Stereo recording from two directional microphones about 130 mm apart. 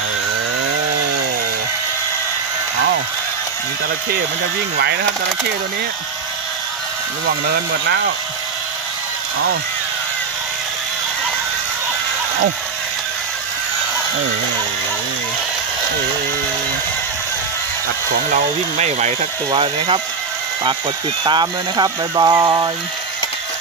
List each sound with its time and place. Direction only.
18.3 s speech: 60° right (ahead or behind)
19.5 s speech: 40° right (ahead or behind)
21.2 s speech: 35° right (ahead or behind)